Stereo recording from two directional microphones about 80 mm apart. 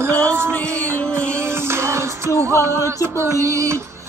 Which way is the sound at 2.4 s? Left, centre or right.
Right.